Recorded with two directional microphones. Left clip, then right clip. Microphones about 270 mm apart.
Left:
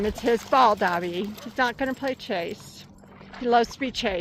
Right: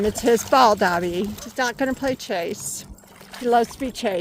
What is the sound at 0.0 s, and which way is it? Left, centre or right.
Speech, centre.